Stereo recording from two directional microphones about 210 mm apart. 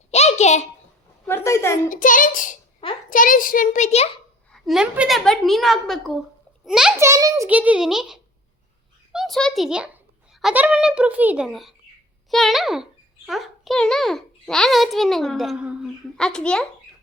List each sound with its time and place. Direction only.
0.1 s a sound: 30° left (ahead or behind)
1.3 s a woman's voice: 10° left (ahead or behind)
1.9 s a child's voice: 40° left (ahead or behind)
4.5 s a child's voice: centre (ahead or behind)
7.0 s a child's voice: 15° right (ahead or behind); by 16.6 s 5° left (ahead or behind)